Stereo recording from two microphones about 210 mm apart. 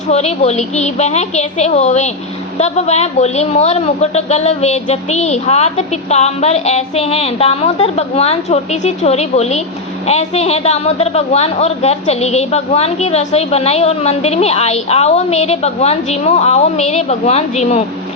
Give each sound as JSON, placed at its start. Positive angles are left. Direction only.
{"t": 0.1, "sound": "a man's voice", "side_deg": 30}